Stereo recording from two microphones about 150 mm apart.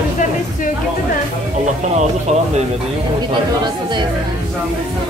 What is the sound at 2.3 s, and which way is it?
Speech, 50° right (ahead or behind).